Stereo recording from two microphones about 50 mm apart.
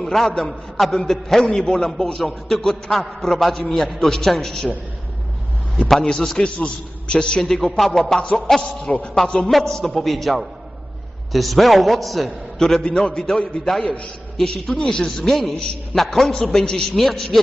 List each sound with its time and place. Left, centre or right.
0.0 s a man's voice: centre
5.9 s a man's voice: centre
9.5 s a man's voice: centre
12.5 s a man's voice: centre
16.9 s a man's voice: centre